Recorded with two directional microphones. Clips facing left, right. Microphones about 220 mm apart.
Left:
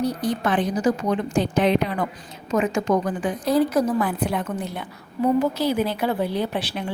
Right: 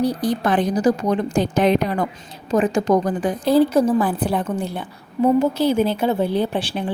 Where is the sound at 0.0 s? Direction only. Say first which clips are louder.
Right 3 dB; 35° right (ahead or behind).